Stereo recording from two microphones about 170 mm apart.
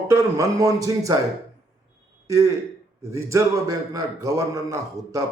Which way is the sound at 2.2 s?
20° right (ahead or behind).